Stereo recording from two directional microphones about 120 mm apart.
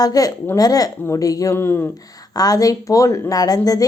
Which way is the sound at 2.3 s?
30° left (ahead or behind).